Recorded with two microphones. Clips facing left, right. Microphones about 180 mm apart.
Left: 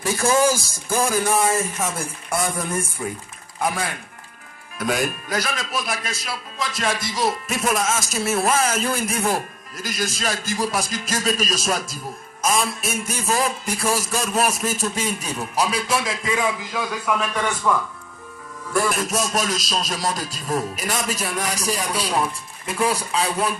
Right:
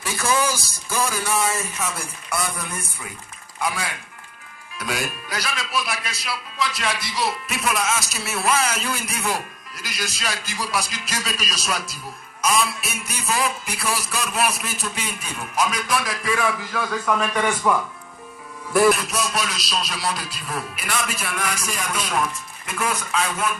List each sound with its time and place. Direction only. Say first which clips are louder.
0.0 s speech: left 4 dB; 45° left (ahead or behind); by 17.8 s 10° right (ahead or behind)
18.9 s speech: left 3 dB; 45° left (ahead or behind)